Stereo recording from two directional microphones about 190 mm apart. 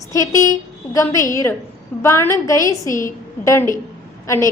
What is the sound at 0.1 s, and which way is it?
A woman's voice, 15° left (ahead or behind).